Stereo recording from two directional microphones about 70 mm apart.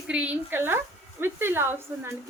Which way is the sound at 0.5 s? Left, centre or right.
Right.